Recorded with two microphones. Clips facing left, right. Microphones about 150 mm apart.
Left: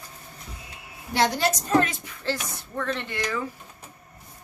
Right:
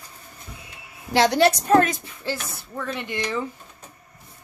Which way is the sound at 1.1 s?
85° right.